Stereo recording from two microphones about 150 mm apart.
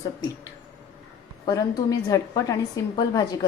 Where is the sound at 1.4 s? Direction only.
25° left (ahead or behind).